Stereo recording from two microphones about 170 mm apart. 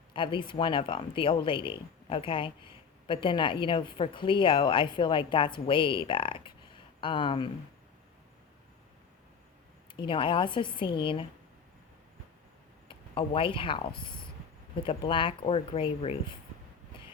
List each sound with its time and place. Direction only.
0.1 s speech: 30° left (ahead or behind)
9.9 s speech: 30° left (ahead or behind)
12.9 s speech: 30° left (ahead or behind)